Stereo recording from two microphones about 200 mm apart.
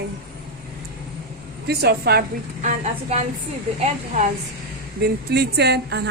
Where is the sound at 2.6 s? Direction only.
35° right (ahead or behind).